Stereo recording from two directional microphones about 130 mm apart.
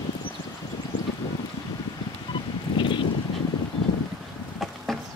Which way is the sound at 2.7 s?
40° left (ahead or behind).